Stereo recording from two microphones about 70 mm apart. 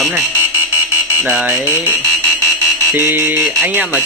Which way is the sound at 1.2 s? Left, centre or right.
Centre.